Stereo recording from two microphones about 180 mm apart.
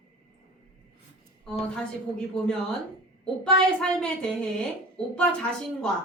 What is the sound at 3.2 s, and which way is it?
Speech, 5° left (ahead or behind).